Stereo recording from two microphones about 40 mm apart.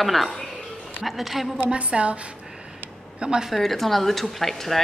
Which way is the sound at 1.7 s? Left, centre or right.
Right.